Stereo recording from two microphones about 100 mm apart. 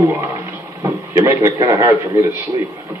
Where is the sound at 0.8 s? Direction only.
25° right (ahead or behind).